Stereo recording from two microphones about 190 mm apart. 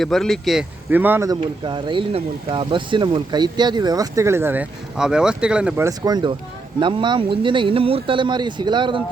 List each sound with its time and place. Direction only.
0.0 s speech: centre (ahead or behind)
0.9 s speech: 10° right (ahead or behind)